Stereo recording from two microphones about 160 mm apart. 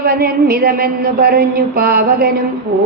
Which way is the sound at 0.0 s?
70° right (ahead or behind).